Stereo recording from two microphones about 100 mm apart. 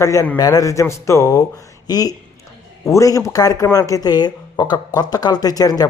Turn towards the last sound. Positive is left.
turn(degrees=40)  # may be behind; listen again after turning